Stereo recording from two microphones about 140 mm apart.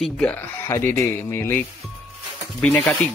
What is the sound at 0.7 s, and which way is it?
Speech, 20° left (ahead or behind).